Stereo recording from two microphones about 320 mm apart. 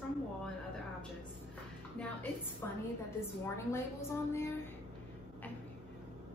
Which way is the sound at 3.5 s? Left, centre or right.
Centre.